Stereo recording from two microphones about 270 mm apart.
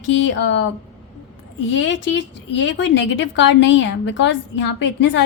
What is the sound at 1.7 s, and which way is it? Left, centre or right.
A woman's voice, left.